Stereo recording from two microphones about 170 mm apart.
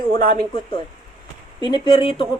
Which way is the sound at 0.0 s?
30° left (ahead or behind).